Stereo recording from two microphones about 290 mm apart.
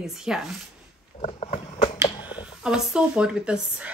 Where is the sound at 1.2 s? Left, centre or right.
Left.